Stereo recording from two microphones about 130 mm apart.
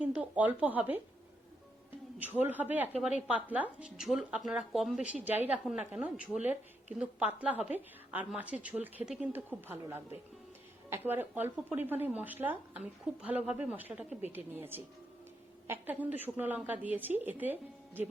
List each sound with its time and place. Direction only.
0.0 s speech: 10° right (ahead or behind)
2.1 s a woman's voice: 15° right (ahead or behind)